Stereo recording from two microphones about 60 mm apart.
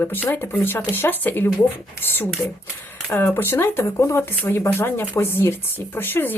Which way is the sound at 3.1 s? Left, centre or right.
Left.